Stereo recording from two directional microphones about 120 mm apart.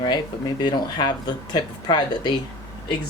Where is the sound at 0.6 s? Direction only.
40° left (ahead or behind).